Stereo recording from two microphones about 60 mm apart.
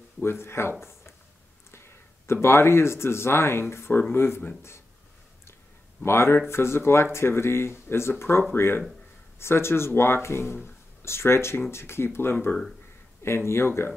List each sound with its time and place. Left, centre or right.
0.2 s speech: left
6.0 s speech: left